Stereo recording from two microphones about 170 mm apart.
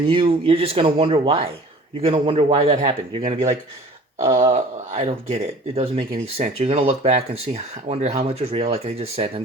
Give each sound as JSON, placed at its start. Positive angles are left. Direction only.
{"t": 0.1, "sound": "speech", "side_deg": -35}
{"t": 4.4, "sound": "speech", "side_deg": -40}